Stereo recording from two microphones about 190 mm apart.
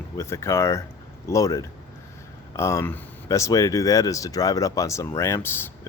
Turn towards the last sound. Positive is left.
turn(degrees=15)  # may be behind; listen again after turning